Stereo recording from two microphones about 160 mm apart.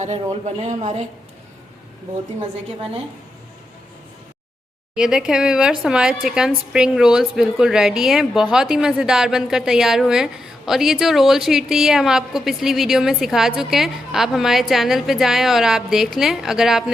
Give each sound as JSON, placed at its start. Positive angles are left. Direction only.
{"t": 0.0, "sound": "speech", "side_deg": -45}
{"t": 4.9, "sound": "a woman's voice", "side_deg": -5}